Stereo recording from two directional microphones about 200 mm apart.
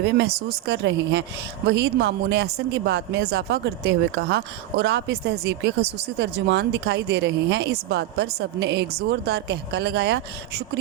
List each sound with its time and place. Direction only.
0.0 s speech: 55° right (ahead or behind)